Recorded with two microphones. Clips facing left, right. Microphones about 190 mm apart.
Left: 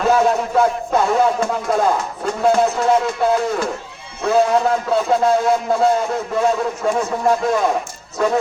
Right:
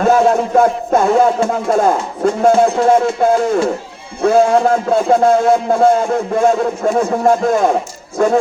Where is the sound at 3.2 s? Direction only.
45° right (ahead or behind).